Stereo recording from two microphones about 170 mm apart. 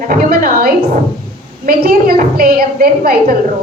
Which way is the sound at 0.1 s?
55° right (ahead or behind).